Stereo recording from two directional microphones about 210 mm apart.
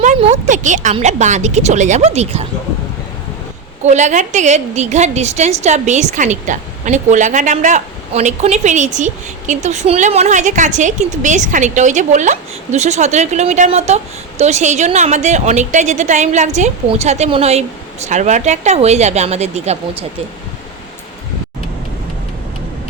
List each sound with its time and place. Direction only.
0.0 s a woman's voice: 35° right (ahead or behind)
3.8 s a woman's voice: 35° right (ahead or behind)